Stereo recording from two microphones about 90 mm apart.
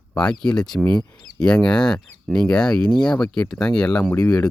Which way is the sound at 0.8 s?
65° right (ahead or behind).